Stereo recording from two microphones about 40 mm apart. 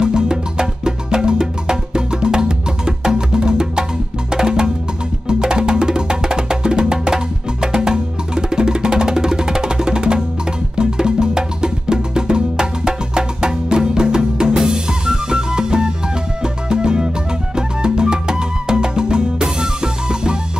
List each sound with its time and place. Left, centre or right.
0.0 s music: centre
14.6 s drum kit: centre
16.6 s music: right